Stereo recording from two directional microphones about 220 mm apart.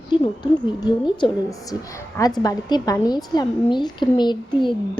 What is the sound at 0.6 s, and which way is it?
A woman's voice, 20° left (ahead or behind).